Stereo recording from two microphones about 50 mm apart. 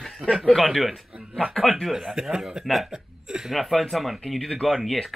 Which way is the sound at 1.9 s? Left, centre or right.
Centre.